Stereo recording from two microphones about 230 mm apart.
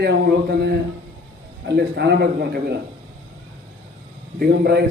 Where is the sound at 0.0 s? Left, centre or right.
Right.